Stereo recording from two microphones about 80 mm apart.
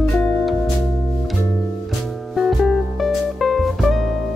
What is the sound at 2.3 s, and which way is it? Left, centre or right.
Music, centre.